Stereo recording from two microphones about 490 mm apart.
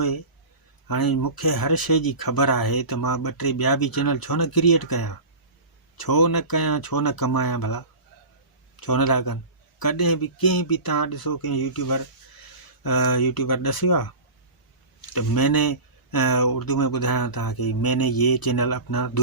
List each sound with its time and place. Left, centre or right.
0.9 s speech: left
15.1 s speech: left